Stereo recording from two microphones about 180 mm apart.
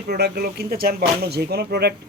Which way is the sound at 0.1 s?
60° right (ahead or behind).